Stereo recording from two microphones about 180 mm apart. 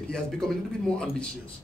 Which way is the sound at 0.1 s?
5° left (ahead or behind).